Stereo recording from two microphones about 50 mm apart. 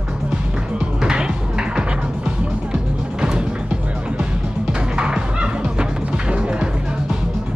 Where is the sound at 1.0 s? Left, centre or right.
Centre.